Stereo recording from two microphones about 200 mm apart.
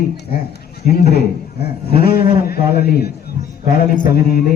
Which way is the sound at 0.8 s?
50° left (ahead or behind).